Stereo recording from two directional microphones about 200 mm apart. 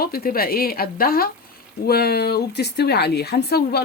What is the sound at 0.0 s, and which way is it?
Speech, 45° left (ahead or behind).